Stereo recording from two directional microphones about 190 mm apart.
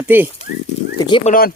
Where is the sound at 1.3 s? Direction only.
50° left (ahead or behind).